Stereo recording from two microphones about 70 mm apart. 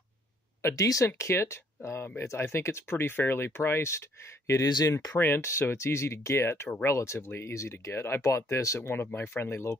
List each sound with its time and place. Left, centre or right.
0.6 s speech: left
5.1 s speech: left
5.4 s speech: left
8.8 s speech: left